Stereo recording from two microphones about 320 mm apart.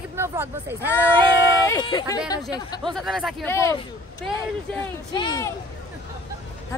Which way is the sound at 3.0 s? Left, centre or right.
Centre.